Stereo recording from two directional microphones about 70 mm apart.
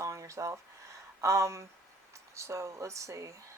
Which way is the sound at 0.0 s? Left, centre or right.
Right.